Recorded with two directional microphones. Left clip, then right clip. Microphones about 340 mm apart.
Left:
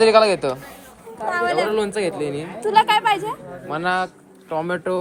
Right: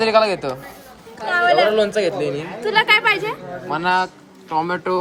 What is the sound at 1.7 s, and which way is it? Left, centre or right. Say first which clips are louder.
Speech: right 4 dB; centre.